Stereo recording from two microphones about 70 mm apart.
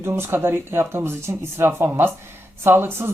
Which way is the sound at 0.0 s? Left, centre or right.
Right.